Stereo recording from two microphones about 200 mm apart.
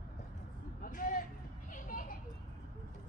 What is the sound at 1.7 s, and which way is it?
Vehicle, 45° left (ahead or behind).